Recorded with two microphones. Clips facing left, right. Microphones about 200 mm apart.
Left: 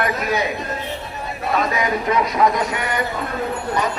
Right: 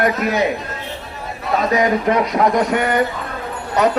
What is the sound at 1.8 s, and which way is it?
Speech, 50° right (ahead or behind).